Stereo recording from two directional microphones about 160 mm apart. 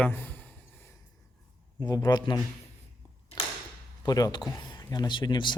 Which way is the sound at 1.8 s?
25° left (ahead or behind).